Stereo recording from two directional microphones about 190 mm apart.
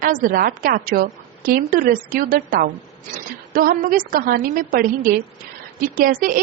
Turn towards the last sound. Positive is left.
turn(degrees=-45)  # may be behind; listen again after turning